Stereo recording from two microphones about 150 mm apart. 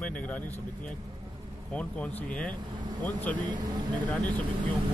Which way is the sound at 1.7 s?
10° left (ahead or behind).